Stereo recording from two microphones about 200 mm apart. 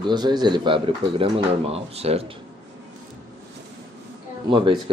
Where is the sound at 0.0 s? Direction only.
20° right (ahead or behind).